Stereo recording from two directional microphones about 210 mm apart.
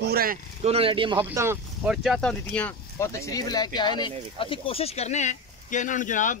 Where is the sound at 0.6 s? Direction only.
30° right (ahead or behind).